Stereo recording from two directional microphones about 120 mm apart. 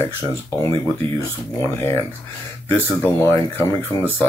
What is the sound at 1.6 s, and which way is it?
Speech, 20° left (ahead or behind).